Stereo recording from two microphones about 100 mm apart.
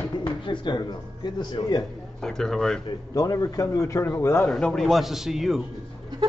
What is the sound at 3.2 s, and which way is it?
A man's voice, 35° left (ahead or behind).